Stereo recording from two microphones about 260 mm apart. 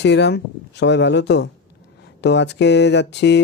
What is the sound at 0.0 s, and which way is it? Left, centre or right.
Speech, left.